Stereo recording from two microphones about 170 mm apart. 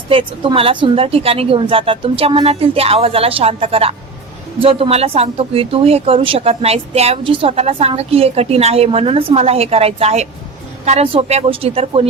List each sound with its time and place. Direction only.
0.1 s speech: 30° right (ahead or behind)